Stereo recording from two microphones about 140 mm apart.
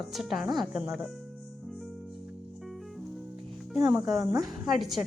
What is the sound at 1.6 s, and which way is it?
Music, centre (ahead or behind).